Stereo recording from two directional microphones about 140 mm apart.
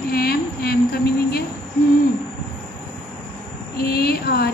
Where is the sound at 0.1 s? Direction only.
90° left.